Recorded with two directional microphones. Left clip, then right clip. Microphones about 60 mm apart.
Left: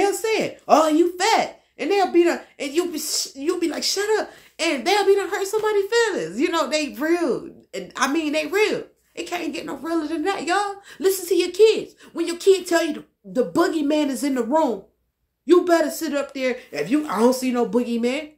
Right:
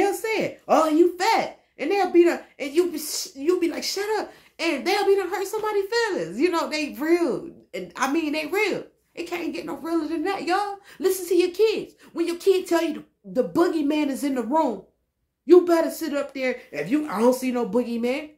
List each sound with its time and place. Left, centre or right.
0.0 s speech: left